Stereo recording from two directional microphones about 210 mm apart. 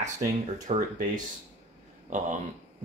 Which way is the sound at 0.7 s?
40° right (ahead or behind).